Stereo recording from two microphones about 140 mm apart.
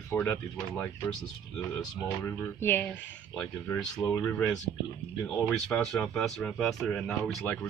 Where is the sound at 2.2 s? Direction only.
15° left (ahead or behind).